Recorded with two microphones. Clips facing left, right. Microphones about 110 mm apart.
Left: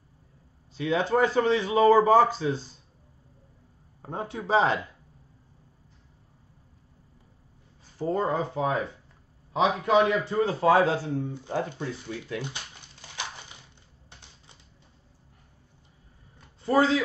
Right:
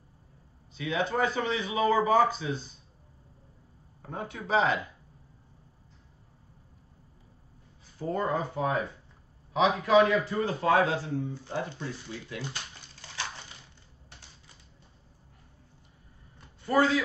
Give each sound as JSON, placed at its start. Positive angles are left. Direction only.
{"t": 0.7, "sound": "speech", "side_deg": 35}
{"t": 4.0, "sound": "speech", "side_deg": 30}
{"t": 8.0, "sound": "speech", "side_deg": 30}
{"t": 16.6, "sound": "speech", "side_deg": 25}